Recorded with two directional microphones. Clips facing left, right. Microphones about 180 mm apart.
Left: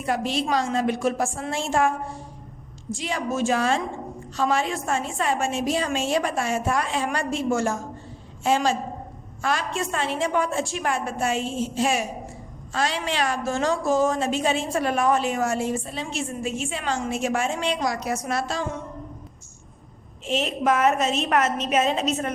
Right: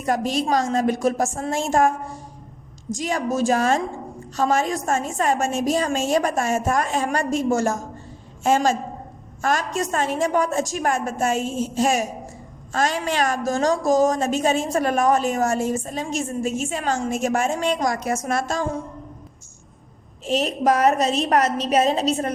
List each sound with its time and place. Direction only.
0.0 s a woman's voice: 45° right (ahead or behind)
20.2 s a woman's voice: 40° right (ahead or behind)